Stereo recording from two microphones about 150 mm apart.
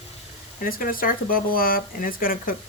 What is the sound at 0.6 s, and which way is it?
Speech, 70° left (ahead or behind).